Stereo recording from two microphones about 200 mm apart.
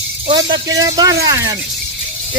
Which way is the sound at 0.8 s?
20° right (ahead or behind).